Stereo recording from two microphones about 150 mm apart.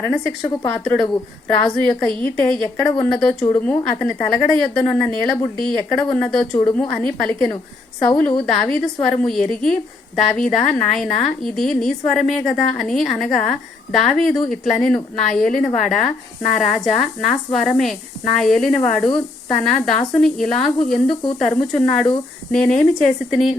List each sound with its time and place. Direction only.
0.0 s a woman's voice: 15° left (ahead or behind)
1.7 s a woman's voice: 5° left (ahead or behind)